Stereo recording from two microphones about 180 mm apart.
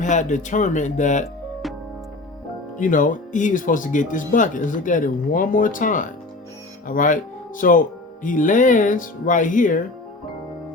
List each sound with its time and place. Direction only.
0.0 s speech: 45° left (ahead or behind)
2.7 s speech: 45° left (ahead or behind)